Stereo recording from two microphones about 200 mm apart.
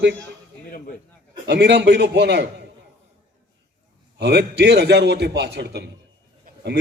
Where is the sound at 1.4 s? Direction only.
60° right (ahead or behind).